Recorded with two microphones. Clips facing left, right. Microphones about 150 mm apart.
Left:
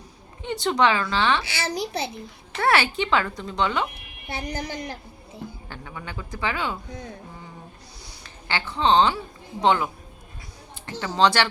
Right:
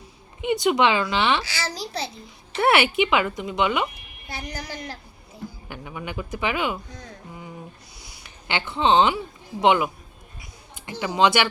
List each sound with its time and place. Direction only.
0.4 s speech: 15° right (ahead or behind)
1.5 s a child's voice: 20° left (ahead or behind)
2.6 s speech: 20° right (ahead or behind)
4.3 s a child's voice: 25° left (ahead or behind)
5.6 s speech: 15° right (ahead or behind)
8.2 s a sound: 20° right (ahead or behind)
8.8 s a woman's voice: 20° right (ahead or behind)
11.0 s speech: 15° right (ahead or behind)